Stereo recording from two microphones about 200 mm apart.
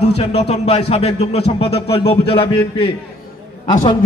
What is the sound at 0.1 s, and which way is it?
A man's voice, 30° left (ahead or behind).